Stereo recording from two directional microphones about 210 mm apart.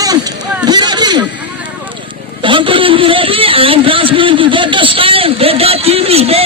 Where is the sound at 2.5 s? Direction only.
25° right (ahead or behind).